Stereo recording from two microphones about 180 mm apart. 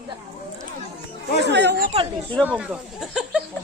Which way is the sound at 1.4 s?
70° right (ahead or behind).